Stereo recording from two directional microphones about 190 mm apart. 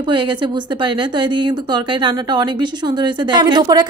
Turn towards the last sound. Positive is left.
turn(degrees=-20)  # may be behind; listen again after turning